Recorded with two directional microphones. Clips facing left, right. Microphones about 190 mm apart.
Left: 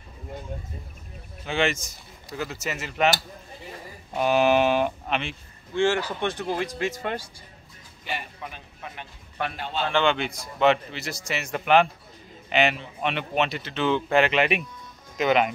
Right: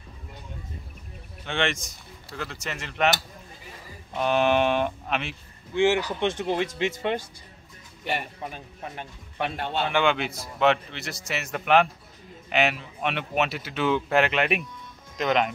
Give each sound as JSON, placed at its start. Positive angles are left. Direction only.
{"t": 1.4, "sound": "speech", "side_deg": 5}
{"t": 4.1, "sound": "speech", "side_deg": 5}
{"t": 5.8, "sound": "speech", "side_deg": -15}
{"t": 8.0, "sound": "speech", "side_deg": -60}
{"t": 8.4, "sound": "a man's voice", "side_deg": -40}
{"t": 9.6, "sound": "a man's voice", "side_deg": -60}
{"t": 9.8, "sound": "speech", "side_deg": -10}